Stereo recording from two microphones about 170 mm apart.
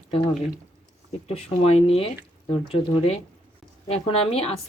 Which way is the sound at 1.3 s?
35° left (ahead or behind).